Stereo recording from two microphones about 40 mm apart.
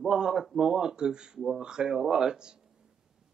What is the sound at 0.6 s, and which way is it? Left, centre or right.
A man's voice, centre.